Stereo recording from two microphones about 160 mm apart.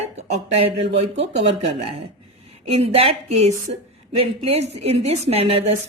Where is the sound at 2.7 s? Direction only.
40° right (ahead or behind).